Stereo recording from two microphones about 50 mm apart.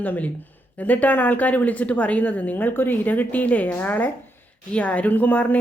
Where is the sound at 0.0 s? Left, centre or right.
Left.